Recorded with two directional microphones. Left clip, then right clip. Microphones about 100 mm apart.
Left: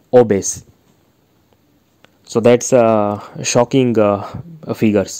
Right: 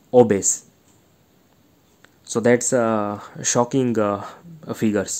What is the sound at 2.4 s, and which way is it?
Speech, 40° left (ahead or behind).